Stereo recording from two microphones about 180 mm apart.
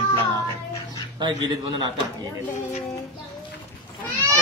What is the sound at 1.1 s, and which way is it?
Speech, 25° right (ahead or behind).